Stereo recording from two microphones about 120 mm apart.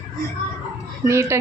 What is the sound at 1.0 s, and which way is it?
Speech, 25° right (ahead or behind).